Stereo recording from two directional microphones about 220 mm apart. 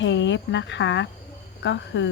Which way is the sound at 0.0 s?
55° left (ahead or behind).